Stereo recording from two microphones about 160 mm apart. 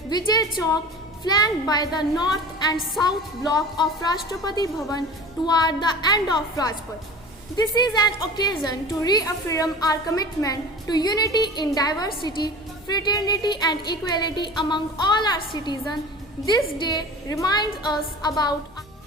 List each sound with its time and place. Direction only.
0.1 s a woman's voice: 25° left (ahead or behind)